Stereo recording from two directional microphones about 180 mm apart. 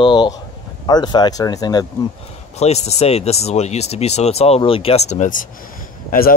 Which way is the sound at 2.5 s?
35° left (ahead or behind).